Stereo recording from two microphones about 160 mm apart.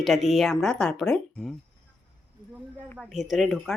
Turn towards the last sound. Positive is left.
turn(degrees=0)  # may be behind; listen again after turning